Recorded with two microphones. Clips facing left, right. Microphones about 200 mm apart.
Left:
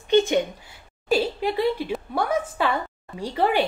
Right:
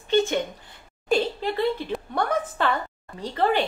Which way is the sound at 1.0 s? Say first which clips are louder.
Left 1 dB; 10° left (ahead or behind).